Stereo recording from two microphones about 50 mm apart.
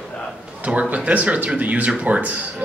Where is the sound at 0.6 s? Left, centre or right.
Right.